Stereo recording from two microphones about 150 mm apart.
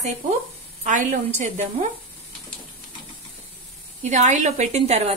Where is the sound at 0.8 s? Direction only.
60° right (ahead or behind).